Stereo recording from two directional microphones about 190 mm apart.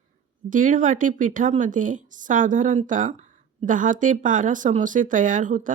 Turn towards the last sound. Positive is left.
turn(degrees=-45)  # may be behind; listen again after turning